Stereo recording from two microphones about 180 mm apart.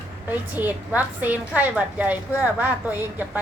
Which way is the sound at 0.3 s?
10° right (ahead or behind).